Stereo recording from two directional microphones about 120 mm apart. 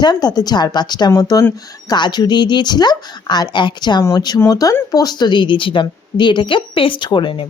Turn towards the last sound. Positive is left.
turn(degrees=45)  # may be behind; listen again after turning